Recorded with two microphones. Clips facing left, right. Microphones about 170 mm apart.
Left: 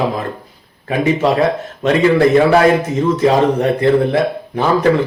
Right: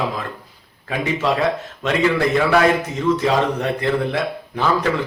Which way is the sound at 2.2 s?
35° left (ahead or behind).